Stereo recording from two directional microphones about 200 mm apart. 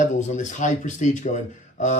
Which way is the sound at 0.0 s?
40° left (ahead or behind).